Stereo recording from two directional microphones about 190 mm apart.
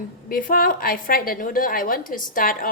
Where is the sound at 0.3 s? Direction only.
50° left (ahead or behind).